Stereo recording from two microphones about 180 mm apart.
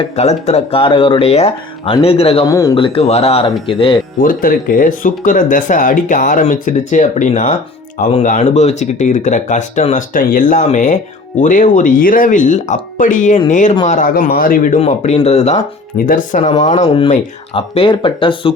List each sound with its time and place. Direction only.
0.0 s speech: 40° left (ahead or behind)
2.5 s a man's voice: 20° left (ahead or behind)
2.7 s speech: 30° left (ahead or behind)
4.2 s speech: 50° left (ahead or behind)
16.0 s speech: 45° left (ahead or behind)
16.4 s speech: 30° left (ahead or behind)